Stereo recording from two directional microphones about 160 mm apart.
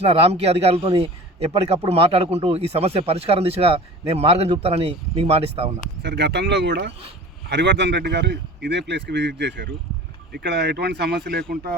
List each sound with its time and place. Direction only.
0.0 s a man's voice: 40° right (ahead or behind)
6.0 s speech: 90° right